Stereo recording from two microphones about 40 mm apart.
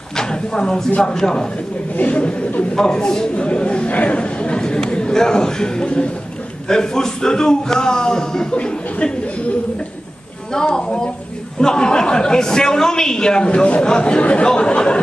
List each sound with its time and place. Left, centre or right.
0.1 s speech: centre
2.0 s speech: left
2.7 s speech: centre
10.6 s speech: centre
13.5 s speech: left